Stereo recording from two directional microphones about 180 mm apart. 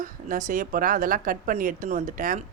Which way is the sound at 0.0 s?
45° right (ahead or behind).